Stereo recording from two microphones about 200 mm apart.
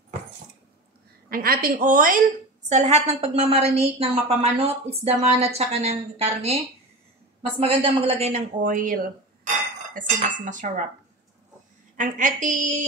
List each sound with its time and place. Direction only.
1.3 s a woman's voice: 45° right (ahead or behind)
7.6 s a woman's voice: 30° right (ahead or behind)
12.0 s a woman's voice: 40° right (ahead or behind)